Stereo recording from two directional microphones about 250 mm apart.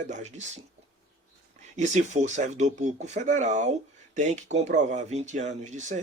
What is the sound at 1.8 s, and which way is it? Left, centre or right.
Speech, right.